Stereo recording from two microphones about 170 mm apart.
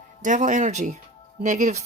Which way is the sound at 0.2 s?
50° right (ahead or behind).